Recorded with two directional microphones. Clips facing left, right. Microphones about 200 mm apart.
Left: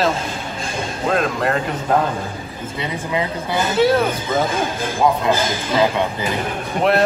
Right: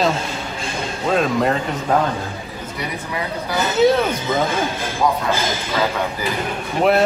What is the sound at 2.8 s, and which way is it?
Speech, 20° left (ahead or behind).